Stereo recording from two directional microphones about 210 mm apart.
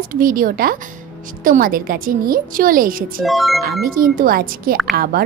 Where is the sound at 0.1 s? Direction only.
40° right (ahead or behind).